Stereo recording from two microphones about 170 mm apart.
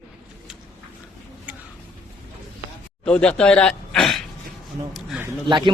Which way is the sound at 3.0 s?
5° left (ahead or behind).